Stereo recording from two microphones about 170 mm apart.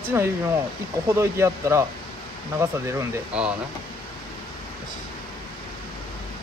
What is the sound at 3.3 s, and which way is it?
Speech, 5° right (ahead or behind).